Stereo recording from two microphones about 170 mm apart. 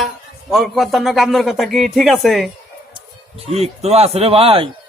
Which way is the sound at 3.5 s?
35° right (ahead or behind).